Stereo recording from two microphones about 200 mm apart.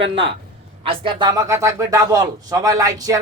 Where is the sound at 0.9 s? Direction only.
25° right (ahead or behind).